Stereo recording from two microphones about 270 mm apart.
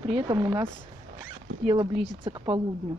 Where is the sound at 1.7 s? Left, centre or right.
Centre.